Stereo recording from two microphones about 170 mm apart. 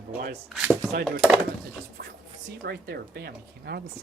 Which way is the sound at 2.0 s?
70° right (ahead or behind).